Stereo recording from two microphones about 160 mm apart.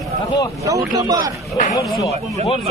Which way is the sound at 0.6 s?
20° right (ahead or behind).